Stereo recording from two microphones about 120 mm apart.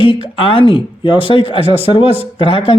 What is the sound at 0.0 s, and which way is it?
Speech, 45° left (ahead or behind).